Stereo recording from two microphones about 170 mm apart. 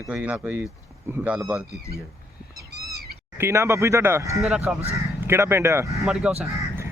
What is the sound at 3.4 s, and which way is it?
Speech, 15° right (ahead or behind).